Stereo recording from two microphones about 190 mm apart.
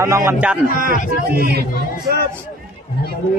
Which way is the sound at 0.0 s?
15° right (ahead or behind).